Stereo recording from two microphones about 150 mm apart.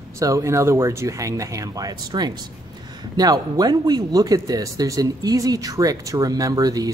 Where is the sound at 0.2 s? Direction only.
20° right (ahead or behind).